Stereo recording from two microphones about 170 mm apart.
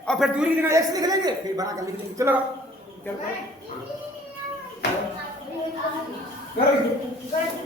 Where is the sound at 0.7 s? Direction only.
20° right (ahead or behind).